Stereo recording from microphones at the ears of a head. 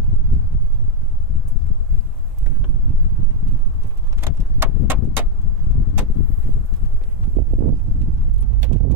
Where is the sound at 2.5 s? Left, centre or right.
Right.